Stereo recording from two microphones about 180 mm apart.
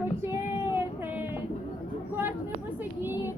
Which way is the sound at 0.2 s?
15° right (ahead or behind).